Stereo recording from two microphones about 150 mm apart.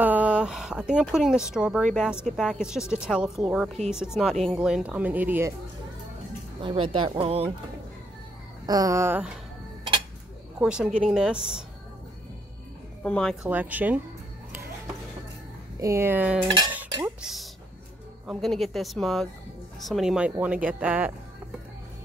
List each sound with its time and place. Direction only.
0.0 s a woman's voice: 10° right (ahead or behind)
6.6 s speech: 35° right (ahead or behind)
8.6 s speech: 25° right (ahead or behind)
10.6 s a woman's voice: 5° right (ahead or behind)
13.0 s a woman's voice: 5° left (ahead or behind)
13.5 s speech: 10° right (ahead or behind)
15.8 s a woman's voice: 15° right (ahead or behind)